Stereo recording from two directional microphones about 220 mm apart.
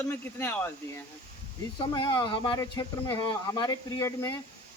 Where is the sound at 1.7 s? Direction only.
20° left (ahead or behind).